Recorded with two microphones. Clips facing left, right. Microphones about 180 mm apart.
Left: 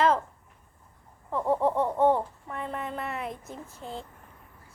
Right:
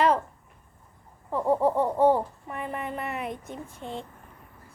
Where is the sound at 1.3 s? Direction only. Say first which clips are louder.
Right 2 dB; 5° right (ahead or behind).